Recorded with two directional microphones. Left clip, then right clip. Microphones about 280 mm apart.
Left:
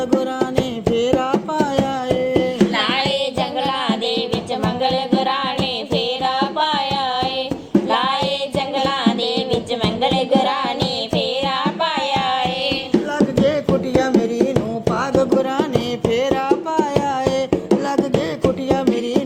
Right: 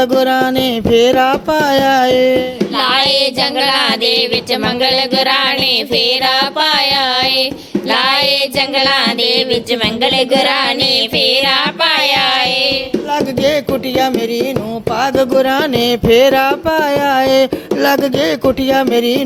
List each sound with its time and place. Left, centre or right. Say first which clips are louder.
1.6 s music: right 9 dB; right
3.8 s music: right 8 dB; right
7.9 s child singing: right 7 dB; right
8.5 s music: right 7 dB; right
15.4 s music: right 7 dB; right
16.7 s music: right 7 dB; right
18.8 s music: right 7 dB; right